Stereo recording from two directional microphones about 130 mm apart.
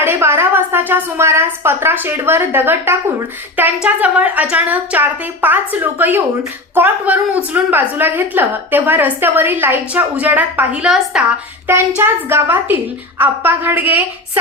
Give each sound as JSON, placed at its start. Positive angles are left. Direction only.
{"t": 0.0, "sound": "a woman's voice", "side_deg": -20}
{"t": 11.7, "sound": "a woman's voice", "side_deg": -15}